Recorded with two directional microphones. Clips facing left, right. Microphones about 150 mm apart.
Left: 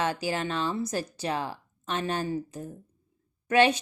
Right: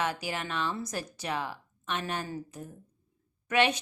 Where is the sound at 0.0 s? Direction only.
30° left (ahead or behind).